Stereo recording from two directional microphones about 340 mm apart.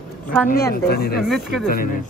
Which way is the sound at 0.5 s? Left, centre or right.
Left.